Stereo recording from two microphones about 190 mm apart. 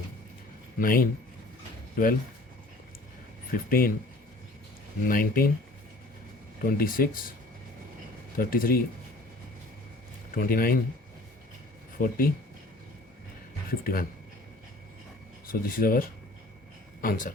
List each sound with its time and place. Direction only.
0.8 s speech: 50° left (ahead or behind)
3.7 s speech: 50° left (ahead or behind)
5.0 s speech: 50° left (ahead or behind)
6.7 s speech: 50° left (ahead or behind)
8.4 s speech: 50° left (ahead or behind)
10.3 s speech: 50° left (ahead or behind)
11.9 s speech: 50° left (ahead or behind)
13.7 s speech: 50° left (ahead or behind)
15.4 s speech: 50° left (ahead or behind)